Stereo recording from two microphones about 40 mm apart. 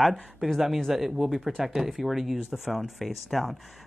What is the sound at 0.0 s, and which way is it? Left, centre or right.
Speech, centre.